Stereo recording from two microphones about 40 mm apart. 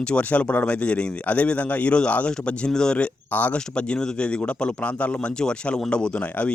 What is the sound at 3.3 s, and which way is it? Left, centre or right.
Speech, left.